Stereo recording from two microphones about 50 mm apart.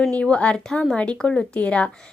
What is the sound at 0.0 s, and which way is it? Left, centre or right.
Speech, left.